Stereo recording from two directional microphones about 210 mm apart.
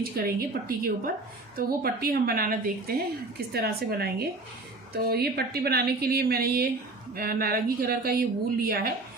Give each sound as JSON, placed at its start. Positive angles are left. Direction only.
{"t": 0.0, "sound": "speech", "side_deg": -45}
{"t": 1.5, "sound": "speech", "side_deg": -45}